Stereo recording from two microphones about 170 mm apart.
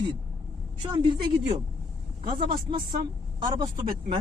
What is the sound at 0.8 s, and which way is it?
Speech, 35° right (ahead or behind).